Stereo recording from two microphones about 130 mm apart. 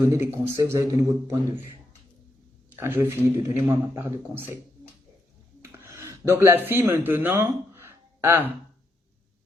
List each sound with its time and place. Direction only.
0.0 s a man's voice: 20° right (ahead or behind)
2.7 s a man's voice: 20° right (ahead or behind)
5.6 s speech: 20° right (ahead or behind)